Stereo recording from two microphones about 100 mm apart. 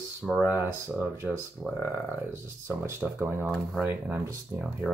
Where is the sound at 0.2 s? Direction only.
5° left (ahead or behind).